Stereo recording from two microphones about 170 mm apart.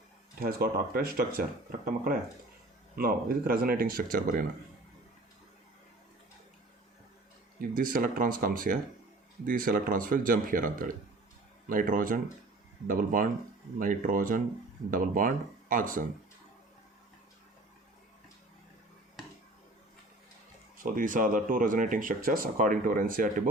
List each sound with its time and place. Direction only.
0.3 s speech: 60° right (ahead or behind)
7.8 s speech: 55° right (ahead or behind)
20.8 s speech: 50° right (ahead or behind)